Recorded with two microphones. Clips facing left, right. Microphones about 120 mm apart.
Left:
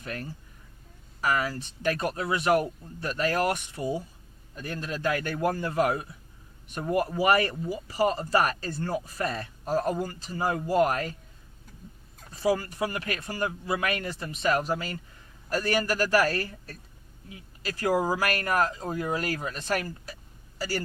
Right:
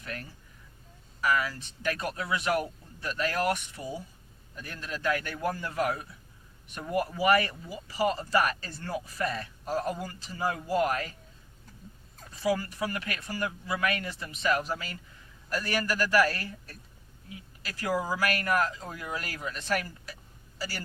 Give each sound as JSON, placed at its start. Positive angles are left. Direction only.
{"t": 0.0, "sound": "speech", "side_deg": 35}
{"t": 12.4, "sound": "a man's voice", "side_deg": 40}
{"t": 17.6, "sound": "speech", "side_deg": 40}